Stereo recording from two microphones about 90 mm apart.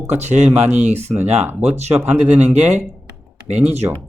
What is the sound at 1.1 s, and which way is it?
Speech, 25° right (ahead or behind).